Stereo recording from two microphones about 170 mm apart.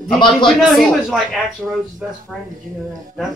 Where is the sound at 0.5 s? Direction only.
Centre (ahead or behind).